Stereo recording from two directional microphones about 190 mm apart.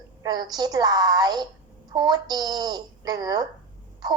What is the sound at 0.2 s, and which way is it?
A woman's voice, 20° right (ahead or behind).